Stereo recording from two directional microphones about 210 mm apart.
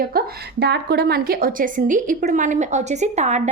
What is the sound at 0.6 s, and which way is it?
A woman's voice, 50° right (ahead or behind).